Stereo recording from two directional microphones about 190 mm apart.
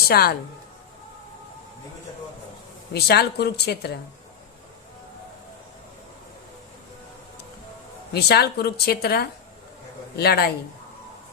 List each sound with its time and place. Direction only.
0.1 s a woman's voice: 55° left (ahead or behind)
2.9 s speech: 60° left (ahead or behind)
8.1 s speech: 55° left (ahead or behind)